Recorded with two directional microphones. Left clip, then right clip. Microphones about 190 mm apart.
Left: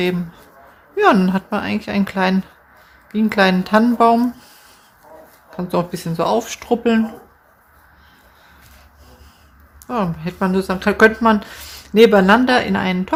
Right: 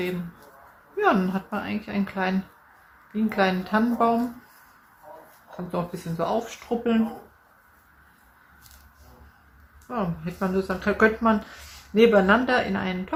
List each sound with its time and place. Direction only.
0.9 s speech: 60° left (ahead or behind)
5.5 s speech: 60° left (ahead or behind)
9.8 s speech: 60° left (ahead or behind)